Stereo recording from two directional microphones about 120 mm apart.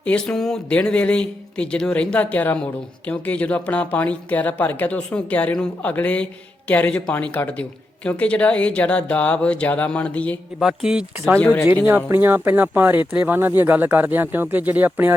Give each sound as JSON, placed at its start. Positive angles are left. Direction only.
{"t": 0.0, "sound": "speech", "side_deg": 5}
{"t": 10.6, "sound": "speech", "side_deg": -5}
{"t": 11.3, "sound": "speech", "side_deg": 15}
{"t": 11.9, "sound": "speech", "side_deg": -20}